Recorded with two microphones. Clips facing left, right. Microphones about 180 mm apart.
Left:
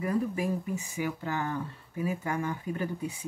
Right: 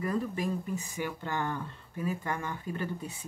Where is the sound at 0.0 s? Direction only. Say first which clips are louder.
Left 2 dB; 10° left (ahead or behind).